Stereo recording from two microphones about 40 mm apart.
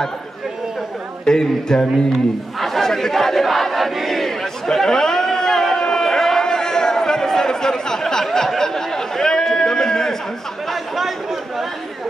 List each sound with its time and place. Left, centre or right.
1.2 s speech: centre
2.1 s battle cry: centre
10.7 s chatter: centre